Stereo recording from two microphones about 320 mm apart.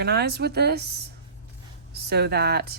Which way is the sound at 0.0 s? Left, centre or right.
Right.